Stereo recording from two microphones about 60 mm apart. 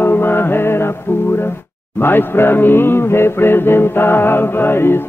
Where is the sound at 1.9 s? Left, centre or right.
Left.